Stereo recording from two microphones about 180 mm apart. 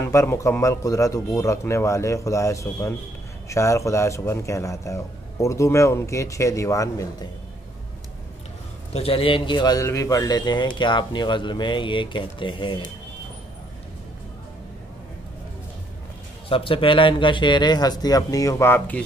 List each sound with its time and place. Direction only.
0.0 s speech: 15° left (ahead or behind)
8.9 s speech: 30° left (ahead or behind)
16.4 s speech: 30° left (ahead or behind); by 19.0 s 10° left (ahead or behind)